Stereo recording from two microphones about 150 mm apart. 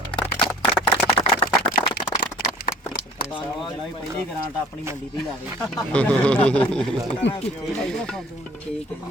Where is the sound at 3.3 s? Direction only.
35° left (ahead or behind).